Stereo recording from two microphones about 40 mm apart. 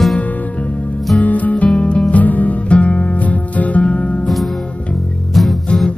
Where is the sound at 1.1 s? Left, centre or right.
Left.